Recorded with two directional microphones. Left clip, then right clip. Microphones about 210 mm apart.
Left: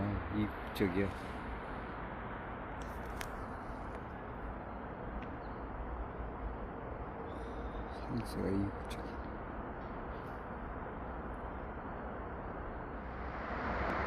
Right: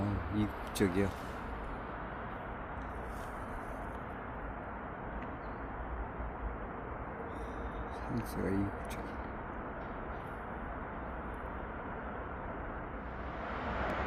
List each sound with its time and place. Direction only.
0.3 s vehicle: 20° right (ahead or behind)
8.1 s speech: 5° right (ahead or behind)